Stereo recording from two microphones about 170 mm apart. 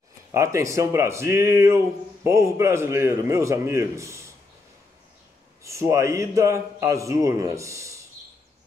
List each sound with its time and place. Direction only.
0.3 s speech: 15° right (ahead or behind)
5.6 s speech: 15° right (ahead or behind)